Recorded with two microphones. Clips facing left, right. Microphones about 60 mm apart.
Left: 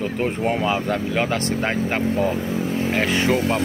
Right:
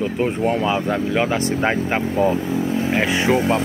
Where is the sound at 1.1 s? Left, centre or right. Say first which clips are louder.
Right 2 dB; centre.